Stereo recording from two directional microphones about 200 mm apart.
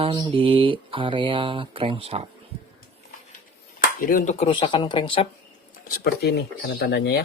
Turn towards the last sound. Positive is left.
turn(degrees=55)  # may be behind; listen again after turning